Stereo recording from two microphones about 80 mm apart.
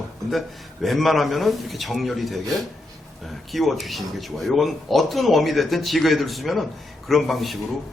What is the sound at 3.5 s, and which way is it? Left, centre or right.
A man's voice, centre.